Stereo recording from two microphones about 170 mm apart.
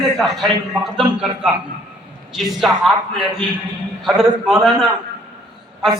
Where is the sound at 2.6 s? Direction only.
Centre (ahead or behind).